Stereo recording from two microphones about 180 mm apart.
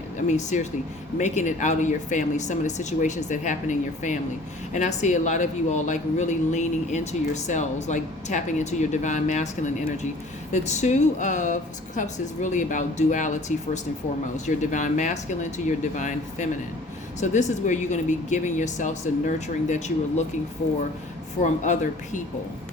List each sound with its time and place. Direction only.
0.3 s speech: 40° left (ahead or behind)
21.4 s speech: 45° left (ahead or behind)